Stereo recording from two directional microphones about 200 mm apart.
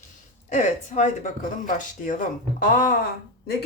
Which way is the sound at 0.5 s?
40° left (ahead or behind).